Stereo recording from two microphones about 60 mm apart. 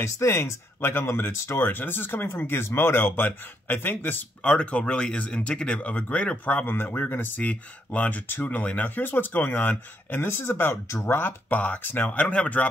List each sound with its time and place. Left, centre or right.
0.0 s speech: left
4.4 s speech: centre; by 7.4 s left
7.4 s speech: left
10.2 s speech: left
11.1 s speech: left
11.8 s speech: left
12.1 s speech: left